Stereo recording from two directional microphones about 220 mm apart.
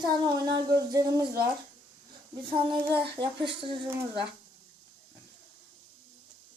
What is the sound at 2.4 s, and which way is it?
Speech, 25° right (ahead or behind).